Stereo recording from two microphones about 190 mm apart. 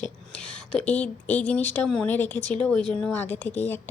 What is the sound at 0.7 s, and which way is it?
Speech, 5° left (ahead or behind).